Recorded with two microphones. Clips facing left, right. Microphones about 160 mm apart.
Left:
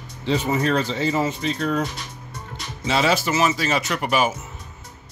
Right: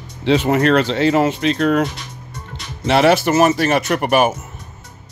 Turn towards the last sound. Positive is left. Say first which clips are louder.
# right 6 dB
turn(degrees=-60)  # may be behind; listen again after turning